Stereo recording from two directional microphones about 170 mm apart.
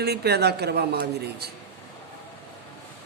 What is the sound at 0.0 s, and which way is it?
A man's voice, 70° right (ahead or behind).